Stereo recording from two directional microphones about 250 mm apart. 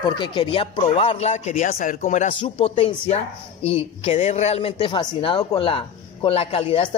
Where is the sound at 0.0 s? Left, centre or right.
Centre.